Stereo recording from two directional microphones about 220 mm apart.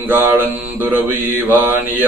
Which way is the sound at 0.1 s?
10° right (ahead or behind).